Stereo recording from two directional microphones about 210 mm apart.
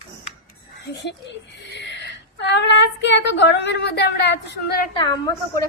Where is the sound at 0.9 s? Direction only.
55° left (ahead or behind).